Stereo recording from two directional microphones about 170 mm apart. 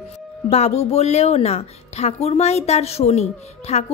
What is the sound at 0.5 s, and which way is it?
A woman's voice, 40° left (ahead or behind).